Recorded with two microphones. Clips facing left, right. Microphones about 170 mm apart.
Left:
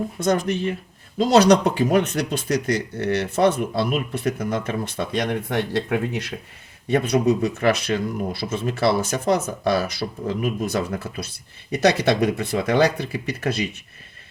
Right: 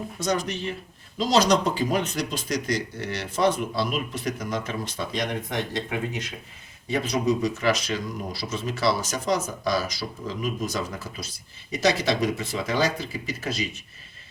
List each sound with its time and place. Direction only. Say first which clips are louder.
0.2 s speech: left 5 dB; 55° left (ahead or behind)